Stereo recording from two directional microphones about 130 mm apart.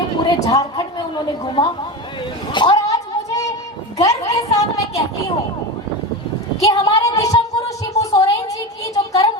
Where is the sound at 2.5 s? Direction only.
35° left (ahead or behind).